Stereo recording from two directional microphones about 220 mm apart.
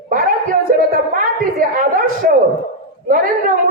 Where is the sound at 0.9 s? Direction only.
40° right (ahead or behind).